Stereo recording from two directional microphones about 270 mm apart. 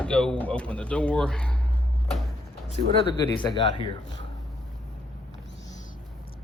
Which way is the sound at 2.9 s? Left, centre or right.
Centre.